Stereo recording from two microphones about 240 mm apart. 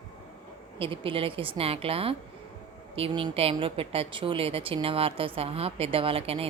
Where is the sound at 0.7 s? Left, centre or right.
Right.